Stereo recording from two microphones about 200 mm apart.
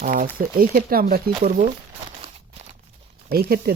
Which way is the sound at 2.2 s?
35° right (ahead or behind).